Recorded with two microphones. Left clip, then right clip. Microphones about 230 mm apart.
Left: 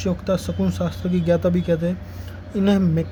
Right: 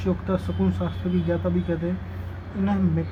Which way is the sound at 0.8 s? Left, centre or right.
Left.